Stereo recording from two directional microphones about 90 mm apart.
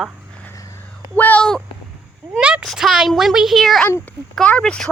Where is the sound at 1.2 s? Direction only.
20° left (ahead or behind).